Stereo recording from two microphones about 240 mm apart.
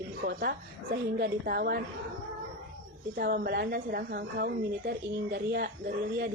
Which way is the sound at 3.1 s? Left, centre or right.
Right.